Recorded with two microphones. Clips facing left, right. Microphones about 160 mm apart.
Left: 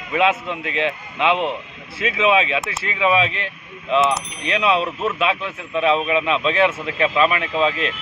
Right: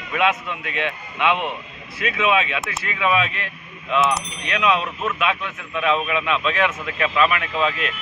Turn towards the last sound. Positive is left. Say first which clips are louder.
# left 3 dB
turn(degrees=25)  # may be behind; listen again after turning